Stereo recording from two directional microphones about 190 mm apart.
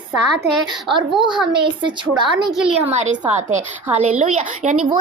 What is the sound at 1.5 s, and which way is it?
Speech, 25° right (ahead or behind).